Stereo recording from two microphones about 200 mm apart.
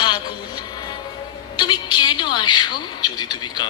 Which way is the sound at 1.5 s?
20° left (ahead or behind).